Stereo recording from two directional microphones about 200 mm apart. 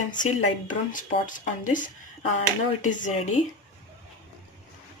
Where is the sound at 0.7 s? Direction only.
40° left (ahead or behind).